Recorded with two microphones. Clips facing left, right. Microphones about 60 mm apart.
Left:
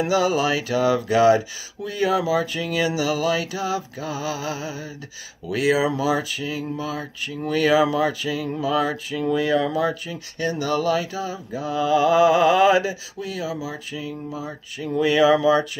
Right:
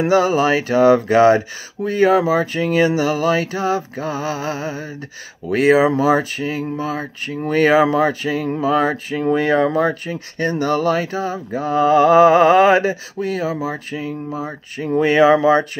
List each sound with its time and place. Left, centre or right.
0.0 s speech: right